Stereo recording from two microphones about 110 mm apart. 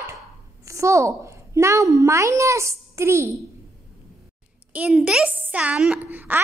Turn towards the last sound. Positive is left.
turn(degrees=-15)  # may be behind; listen again after turning